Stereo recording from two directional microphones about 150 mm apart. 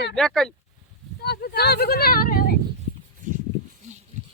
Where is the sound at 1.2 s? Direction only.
90° left.